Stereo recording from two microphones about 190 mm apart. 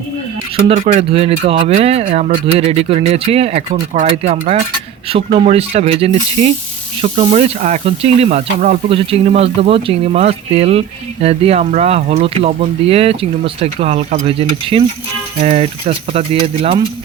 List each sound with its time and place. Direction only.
0.7 s speech: 40° right (ahead or behind)
1.1 s speech: 30° right (ahead or behind)